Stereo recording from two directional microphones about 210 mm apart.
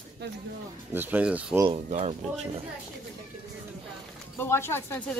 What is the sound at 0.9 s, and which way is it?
Speech, 10° right (ahead or behind).